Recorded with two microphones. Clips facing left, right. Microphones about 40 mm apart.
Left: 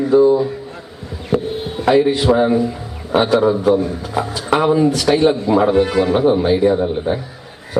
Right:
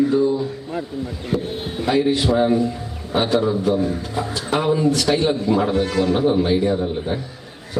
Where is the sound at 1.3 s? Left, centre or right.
Left.